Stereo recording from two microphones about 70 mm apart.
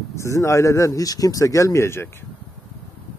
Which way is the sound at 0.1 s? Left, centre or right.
Left.